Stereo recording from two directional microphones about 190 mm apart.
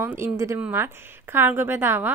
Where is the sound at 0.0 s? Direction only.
15° right (ahead or behind).